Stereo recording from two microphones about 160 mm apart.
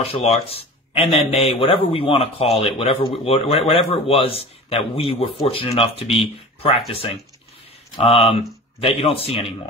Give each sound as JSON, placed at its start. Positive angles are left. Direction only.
{"t": 0.0, "sound": "speech", "side_deg": 40}
{"t": 7.9, "sound": "speech", "side_deg": 40}